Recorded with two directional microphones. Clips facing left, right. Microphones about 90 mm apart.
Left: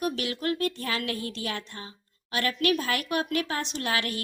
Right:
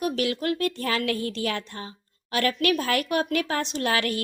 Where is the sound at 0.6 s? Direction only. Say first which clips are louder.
Right 3 dB; 40° right (ahead or behind).